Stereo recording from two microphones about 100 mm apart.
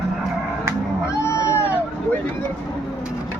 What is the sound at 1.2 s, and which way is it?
Cat, 30° left (ahead or behind).